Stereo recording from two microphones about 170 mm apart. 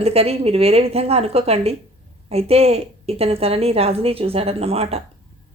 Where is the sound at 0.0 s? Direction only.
35° right (ahead or behind).